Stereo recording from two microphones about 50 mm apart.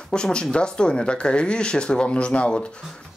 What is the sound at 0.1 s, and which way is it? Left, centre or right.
Speech, centre.